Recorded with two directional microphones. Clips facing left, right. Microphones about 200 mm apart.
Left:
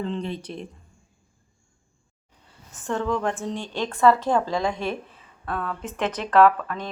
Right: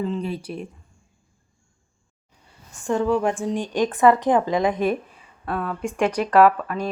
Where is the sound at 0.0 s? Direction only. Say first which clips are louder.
Right 3 dB; 10° right (ahead or behind).